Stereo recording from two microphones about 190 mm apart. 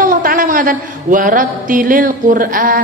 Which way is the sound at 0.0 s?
45° right (ahead or behind).